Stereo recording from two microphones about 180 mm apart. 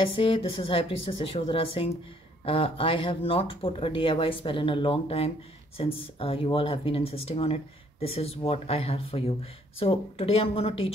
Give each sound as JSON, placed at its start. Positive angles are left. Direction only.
{"t": 0.0, "sound": "speech", "side_deg": 30}